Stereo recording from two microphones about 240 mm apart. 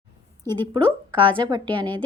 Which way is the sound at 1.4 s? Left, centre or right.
Centre.